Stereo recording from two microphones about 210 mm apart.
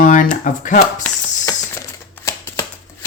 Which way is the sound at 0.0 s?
40° left (ahead or behind).